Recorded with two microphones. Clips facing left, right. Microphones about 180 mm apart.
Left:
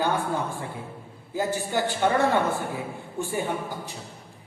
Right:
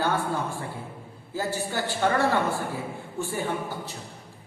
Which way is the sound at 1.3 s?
20° left (ahead or behind).